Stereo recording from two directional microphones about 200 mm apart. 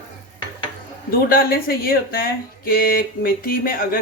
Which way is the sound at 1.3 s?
50° left (ahead or behind).